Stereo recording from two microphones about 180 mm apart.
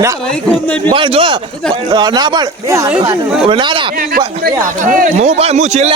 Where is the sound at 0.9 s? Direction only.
30° right (ahead or behind); by 3.2 s 10° right (ahead or behind).